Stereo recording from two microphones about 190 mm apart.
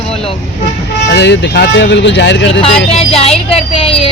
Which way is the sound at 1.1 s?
65° left (ahead or behind).